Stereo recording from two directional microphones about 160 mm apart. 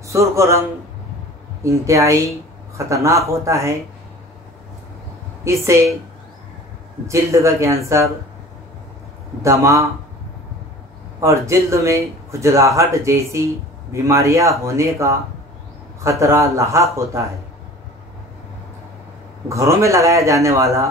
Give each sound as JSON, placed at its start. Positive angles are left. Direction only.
{"t": 0.0, "sound": "a man's voice", "side_deg": -20}
{"t": 1.6, "sound": "speech", "side_deg": -20}
{"t": 5.4, "sound": "a man's voice", "side_deg": -20}
{"t": 7.1, "sound": "a man's voice", "side_deg": -20}
{"t": 9.4, "sound": "speech", "side_deg": -20}
{"t": 11.1, "sound": "a man's voice", "side_deg": -20}
{"t": 19.5, "sound": "speech", "side_deg": -20}